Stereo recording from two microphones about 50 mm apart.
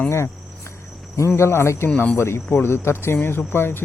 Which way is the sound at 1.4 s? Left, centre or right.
Left.